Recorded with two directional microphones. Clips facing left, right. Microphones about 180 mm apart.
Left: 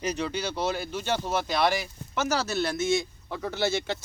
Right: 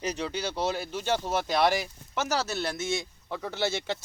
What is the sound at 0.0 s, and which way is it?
Speech, 30° right (ahead or behind).